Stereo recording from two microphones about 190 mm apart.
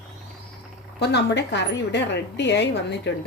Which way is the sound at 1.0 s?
65° left (ahead or behind).